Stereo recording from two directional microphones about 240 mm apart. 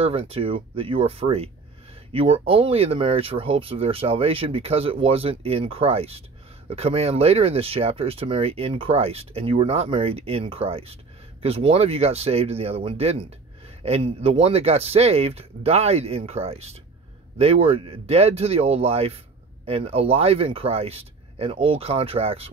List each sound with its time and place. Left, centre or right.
0.0 s speech: right